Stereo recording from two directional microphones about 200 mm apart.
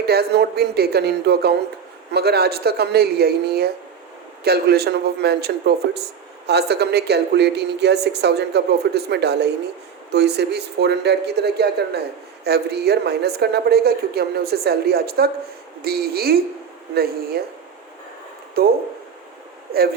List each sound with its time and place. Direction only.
0.0 s a woman's voice: 55° right (ahead or behind)